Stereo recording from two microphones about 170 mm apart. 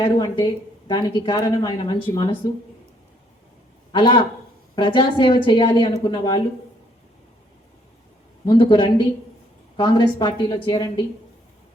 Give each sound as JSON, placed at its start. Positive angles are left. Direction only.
{"t": 0.0, "sound": "speech", "side_deg": 25}
{"t": 3.9, "sound": "speech", "side_deg": 25}
{"t": 8.4, "sound": "speech", "side_deg": 25}